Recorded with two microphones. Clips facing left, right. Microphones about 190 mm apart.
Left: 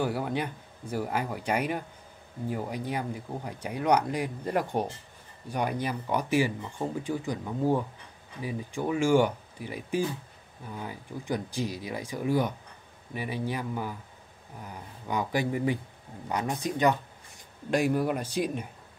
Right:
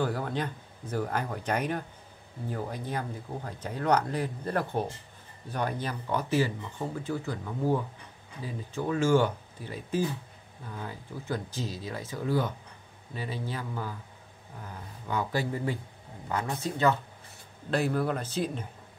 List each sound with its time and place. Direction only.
0.0 s speech: 10° left (ahead or behind)